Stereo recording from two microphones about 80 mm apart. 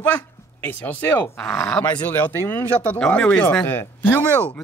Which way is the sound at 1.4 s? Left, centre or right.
Centre.